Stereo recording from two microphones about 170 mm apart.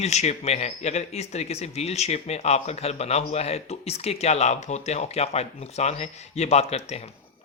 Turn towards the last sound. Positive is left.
turn(degrees=40)  # may be behind; listen again after turning